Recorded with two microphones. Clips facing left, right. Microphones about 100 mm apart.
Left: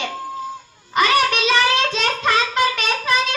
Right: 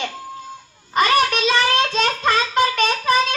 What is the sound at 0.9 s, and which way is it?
Speech, 40° right (ahead or behind).